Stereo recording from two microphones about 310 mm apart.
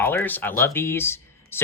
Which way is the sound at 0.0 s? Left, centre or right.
Centre.